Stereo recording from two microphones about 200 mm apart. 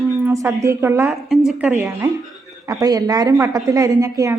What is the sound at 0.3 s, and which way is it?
A woman's voice, 15° right (ahead or behind).